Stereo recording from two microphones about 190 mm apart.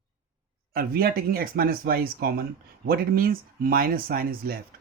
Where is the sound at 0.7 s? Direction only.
50° right (ahead or behind).